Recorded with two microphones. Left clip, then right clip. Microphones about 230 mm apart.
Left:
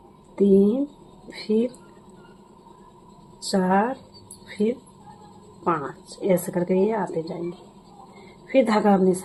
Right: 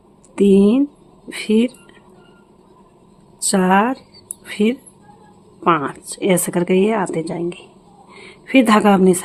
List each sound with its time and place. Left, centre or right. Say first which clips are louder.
0.3 s speech: right 5 dB; right
3.4 s speech: right 6 dB; right
8.4 s speech: right 6 dB; right